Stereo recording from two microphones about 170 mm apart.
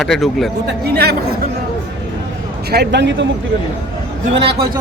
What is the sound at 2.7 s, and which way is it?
Speech, 85° right.